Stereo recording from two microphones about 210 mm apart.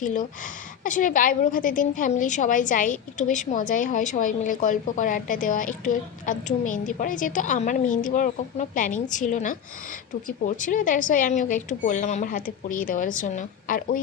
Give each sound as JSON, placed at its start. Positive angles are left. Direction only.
{"t": 0.0, "sound": "a woman's voice", "side_deg": 40}